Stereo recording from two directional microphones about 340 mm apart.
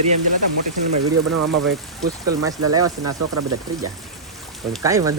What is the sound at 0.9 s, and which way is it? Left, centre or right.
Speech, right.